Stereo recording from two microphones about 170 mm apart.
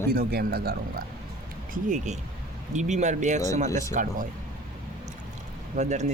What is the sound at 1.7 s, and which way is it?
Speech, 50° right (ahead or behind).